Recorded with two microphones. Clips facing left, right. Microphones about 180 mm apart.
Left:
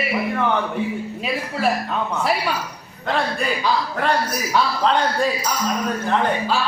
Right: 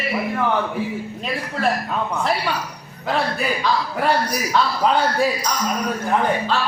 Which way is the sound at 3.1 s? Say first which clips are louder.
Even; 5° right (ahead or behind).